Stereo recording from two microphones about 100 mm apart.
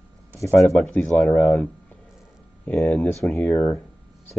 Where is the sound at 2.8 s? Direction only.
15° left (ahead or behind).